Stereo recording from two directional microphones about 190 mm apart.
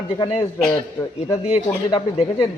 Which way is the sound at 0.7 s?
15° left (ahead or behind).